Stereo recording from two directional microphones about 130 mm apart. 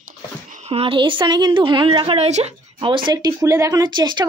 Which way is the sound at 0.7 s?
45° right (ahead or behind).